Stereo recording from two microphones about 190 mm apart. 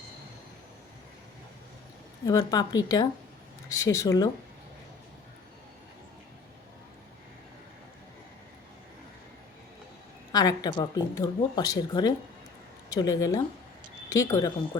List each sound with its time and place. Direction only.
2.2 s speech: 20° left (ahead or behind)
10.3 s speech: 20° left (ahead or behind)